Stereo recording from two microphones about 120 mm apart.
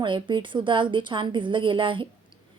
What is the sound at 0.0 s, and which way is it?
A woman's voice, 45° right (ahead or behind).